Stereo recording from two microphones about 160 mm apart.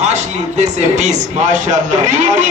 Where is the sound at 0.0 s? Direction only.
45° right (ahead or behind).